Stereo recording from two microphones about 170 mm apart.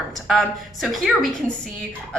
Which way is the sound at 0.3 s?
Centre (ahead or behind).